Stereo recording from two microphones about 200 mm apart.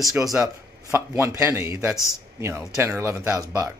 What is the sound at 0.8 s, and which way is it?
Speech, 10° right (ahead or behind).